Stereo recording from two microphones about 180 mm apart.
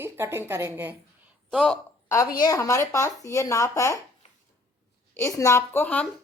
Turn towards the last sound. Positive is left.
turn(degrees=5)  # may be behind; listen again after turning